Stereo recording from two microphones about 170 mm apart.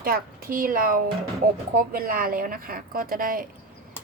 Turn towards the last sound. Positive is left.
turn(degrees=-55)  # may be behind; listen again after turning